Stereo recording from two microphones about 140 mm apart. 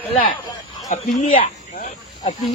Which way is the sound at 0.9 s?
60° left (ahead or behind).